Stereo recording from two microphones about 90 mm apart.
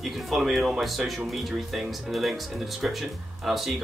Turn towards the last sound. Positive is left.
turn(degrees=0)  # may be behind; listen again after turning